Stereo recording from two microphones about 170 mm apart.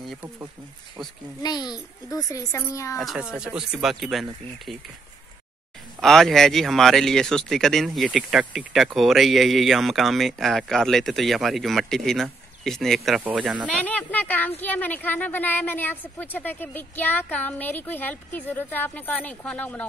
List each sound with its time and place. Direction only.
1.4 s a child's voice: 25° left (ahead or behind)
3.0 s speech: 5° right (ahead or behind)
5.9 s speech: centre (ahead or behind)
13.8 s a sound: 10° left (ahead or behind)
14.6 s a woman's voice: 10° left (ahead or behind)